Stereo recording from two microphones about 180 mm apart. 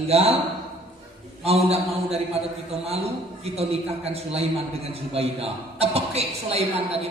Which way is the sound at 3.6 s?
35° right (ahead or behind).